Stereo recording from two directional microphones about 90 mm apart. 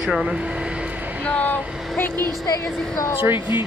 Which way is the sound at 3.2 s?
25° right (ahead or behind).